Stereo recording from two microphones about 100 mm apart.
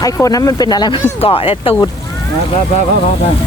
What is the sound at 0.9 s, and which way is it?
Speech, 65° left (ahead or behind).